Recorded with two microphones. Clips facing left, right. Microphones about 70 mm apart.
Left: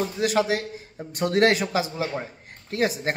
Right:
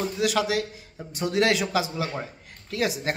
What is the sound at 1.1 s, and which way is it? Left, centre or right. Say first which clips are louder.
A man's voice: left 3 dB; left.